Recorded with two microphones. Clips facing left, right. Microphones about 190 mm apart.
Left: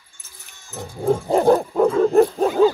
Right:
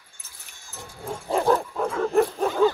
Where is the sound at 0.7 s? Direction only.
60° left (ahead or behind).